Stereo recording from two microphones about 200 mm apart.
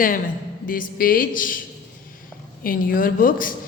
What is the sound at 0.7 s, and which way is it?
Speech, 45° left (ahead or behind).